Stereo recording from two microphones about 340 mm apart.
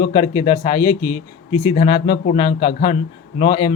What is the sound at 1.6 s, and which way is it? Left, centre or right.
A man's voice, centre.